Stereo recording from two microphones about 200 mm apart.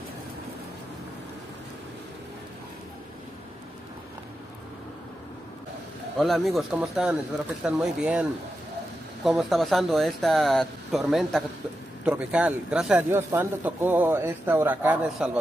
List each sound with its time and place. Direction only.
6.1 s a man's voice: centre (ahead or behind)